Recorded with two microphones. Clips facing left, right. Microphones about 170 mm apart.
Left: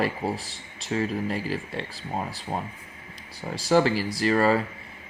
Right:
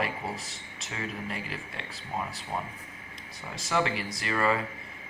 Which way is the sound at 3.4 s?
35° left (ahead or behind).